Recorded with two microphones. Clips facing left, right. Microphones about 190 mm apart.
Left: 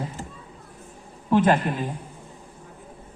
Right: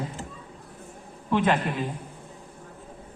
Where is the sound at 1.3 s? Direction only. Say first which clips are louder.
Left 4 dB; 40° left (ahead or behind).